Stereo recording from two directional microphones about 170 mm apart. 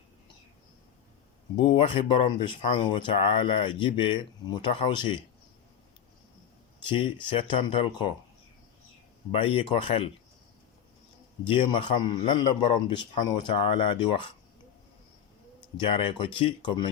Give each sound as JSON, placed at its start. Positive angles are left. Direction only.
{"t": 1.5, "sound": "speech", "side_deg": 30}
{"t": 6.8, "sound": "a man's voice", "side_deg": 30}
{"t": 9.3, "sound": "a man's voice", "side_deg": 35}
{"t": 11.4, "sound": "a man's voice", "side_deg": 30}
{"t": 15.8, "sound": "speech", "side_deg": 30}